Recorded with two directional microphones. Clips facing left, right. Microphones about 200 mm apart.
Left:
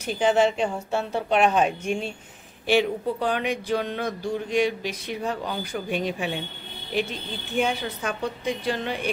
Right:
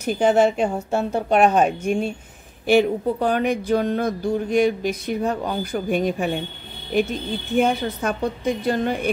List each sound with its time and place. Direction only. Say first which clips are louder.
0.0 s speech: right 4 dB; 45° right (ahead or behind)